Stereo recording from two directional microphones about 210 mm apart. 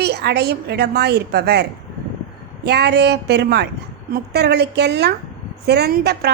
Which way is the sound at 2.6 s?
50° right (ahead or behind).